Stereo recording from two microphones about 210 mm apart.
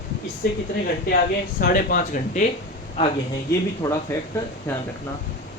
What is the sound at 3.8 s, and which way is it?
Speech, 15° left (ahead or behind).